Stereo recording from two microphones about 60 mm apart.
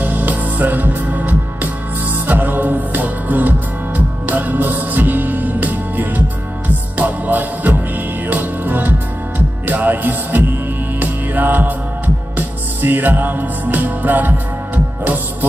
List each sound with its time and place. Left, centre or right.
0.0 s music: right